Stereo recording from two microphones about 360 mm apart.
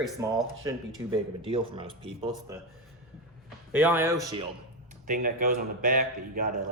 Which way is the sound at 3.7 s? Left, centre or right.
Centre.